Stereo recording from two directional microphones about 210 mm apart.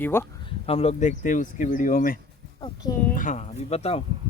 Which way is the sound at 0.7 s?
30° left (ahead or behind).